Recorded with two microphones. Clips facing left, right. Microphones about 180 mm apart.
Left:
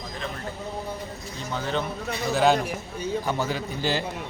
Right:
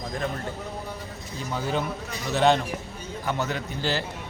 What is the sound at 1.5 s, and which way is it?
A man's voice, 5° right (ahead or behind).